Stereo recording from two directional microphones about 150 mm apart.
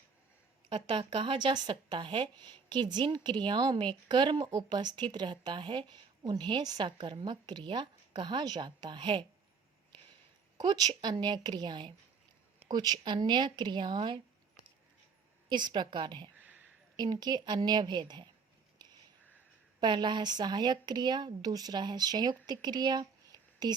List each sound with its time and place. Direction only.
0.7 s a woman's voice: 35° right (ahead or behind)
10.7 s a woman's voice: 30° right (ahead or behind)
15.4 s a woman's voice: 30° right (ahead or behind)
16.4 s a sound: 10° right (ahead or behind)
17.0 s speech: 30° right (ahead or behind)
19.8 s speech: 30° right (ahead or behind)